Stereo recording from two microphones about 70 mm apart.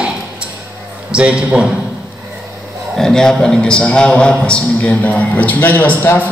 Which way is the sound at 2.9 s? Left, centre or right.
Centre.